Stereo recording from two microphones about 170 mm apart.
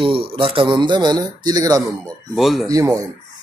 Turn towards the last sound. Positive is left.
turn(degrees=-20)  # may be behind; listen again after turning